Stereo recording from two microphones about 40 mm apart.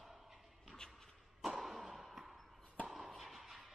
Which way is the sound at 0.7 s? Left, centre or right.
Centre.